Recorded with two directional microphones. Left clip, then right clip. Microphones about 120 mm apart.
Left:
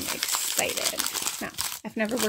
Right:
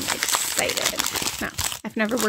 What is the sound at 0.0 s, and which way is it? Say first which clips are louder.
Crumpling: right 5 dB; 30° right (ahead or behind).